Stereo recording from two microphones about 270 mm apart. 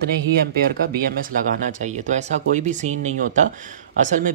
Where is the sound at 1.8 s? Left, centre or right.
Right.